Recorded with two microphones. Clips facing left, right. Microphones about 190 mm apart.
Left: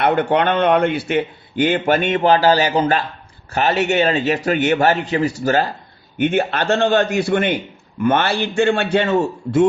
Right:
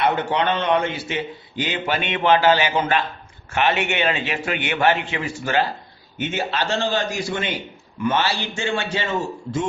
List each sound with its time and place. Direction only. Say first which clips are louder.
0.0 s a man's voice: left 5 dB; 55° left (ahead or behind); by 5.6 s 40° left (ahead or behind)
6.1 s a man's voice: left 7 dB; 55° left (ahead or behind)